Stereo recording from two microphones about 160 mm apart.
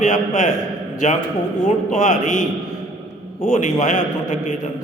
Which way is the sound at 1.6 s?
50° left (ahead or behind).